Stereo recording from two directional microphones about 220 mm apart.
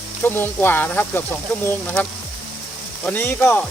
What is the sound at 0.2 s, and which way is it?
Speech, 10° left (ahead or behind).